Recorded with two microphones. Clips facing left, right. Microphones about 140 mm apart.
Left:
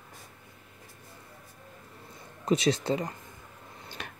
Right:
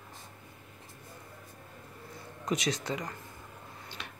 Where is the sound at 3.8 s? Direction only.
50° left (ahead or behind).